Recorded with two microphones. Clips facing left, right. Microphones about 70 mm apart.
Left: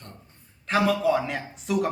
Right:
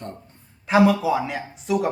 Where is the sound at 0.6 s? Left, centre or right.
Centre.